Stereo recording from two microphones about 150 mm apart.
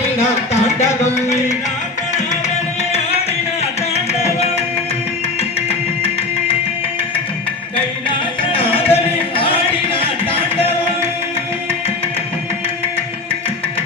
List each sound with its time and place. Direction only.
3.9 s music: 45° left (ahead or behind)
8.5 s music: 40° left (ahead or behind)